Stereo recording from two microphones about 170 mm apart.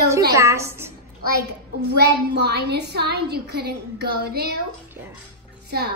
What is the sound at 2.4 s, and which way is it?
A woman's voice, 70° right (ahead or behind).